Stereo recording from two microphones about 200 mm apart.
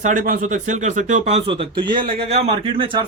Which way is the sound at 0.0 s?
40° right (ahead or behind).